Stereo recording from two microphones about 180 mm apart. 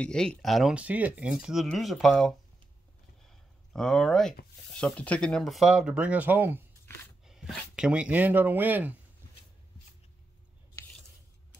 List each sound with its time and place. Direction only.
0.0 s speech: 5° left (ahead or behind)
3.3 s a sound: 5° left (ahead or behind)
4.7 s speech: 5° left (ahead or behind); by 8.9 s 10° right (ahead or behind)